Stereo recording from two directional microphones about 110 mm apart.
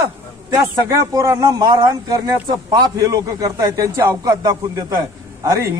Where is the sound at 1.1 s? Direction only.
30° right (ahead or behind).